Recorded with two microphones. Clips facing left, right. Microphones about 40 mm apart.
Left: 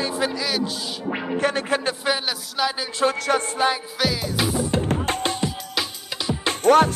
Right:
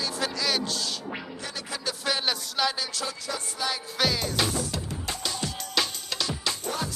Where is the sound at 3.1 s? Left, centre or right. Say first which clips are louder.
Left 12 dB; left.